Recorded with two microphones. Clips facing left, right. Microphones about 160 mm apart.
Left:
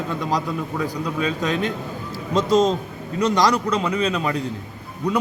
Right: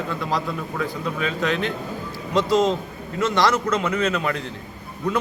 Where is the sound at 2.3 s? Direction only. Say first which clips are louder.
Left 1 dB; 20° left (ahead or behind).